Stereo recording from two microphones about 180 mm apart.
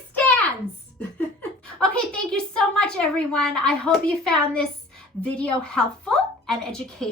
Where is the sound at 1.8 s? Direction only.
5° left (ahead or behind).